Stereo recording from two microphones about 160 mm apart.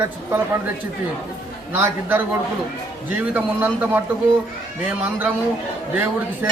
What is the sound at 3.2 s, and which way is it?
A man's voice, 10° right (ahead or behind).